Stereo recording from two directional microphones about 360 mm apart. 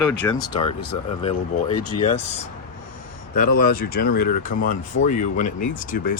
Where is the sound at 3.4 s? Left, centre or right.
Left.